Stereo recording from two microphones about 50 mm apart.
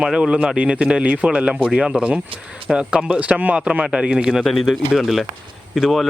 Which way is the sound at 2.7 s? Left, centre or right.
Right.